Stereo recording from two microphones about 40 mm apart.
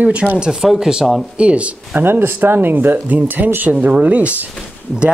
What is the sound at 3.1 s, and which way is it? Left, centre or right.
Speech, right.